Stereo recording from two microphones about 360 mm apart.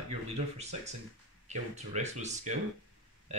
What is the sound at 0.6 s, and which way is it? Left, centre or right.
Speech, centre.